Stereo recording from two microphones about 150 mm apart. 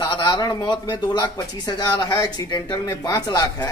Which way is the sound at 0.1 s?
30° left (ahead or behind).